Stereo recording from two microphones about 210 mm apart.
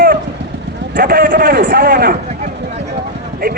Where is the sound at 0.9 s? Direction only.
45° right (ahead or behind).